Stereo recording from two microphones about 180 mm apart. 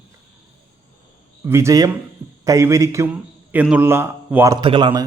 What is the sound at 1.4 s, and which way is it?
A man's voice, 15° right (ahead or behind).